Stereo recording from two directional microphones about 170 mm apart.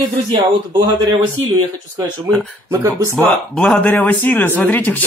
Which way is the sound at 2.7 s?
15° right (ahead or behind).